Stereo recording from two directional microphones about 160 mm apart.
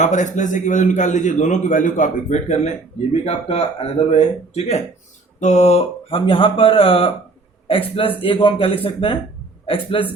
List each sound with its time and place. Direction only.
0.0 s a man's voice: 50° left (ahead or behind); by 10.1 s 35° left (ahead or behind)